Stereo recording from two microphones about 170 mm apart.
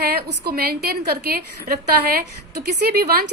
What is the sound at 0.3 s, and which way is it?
A woman's voice, 65° right (ahead or behind).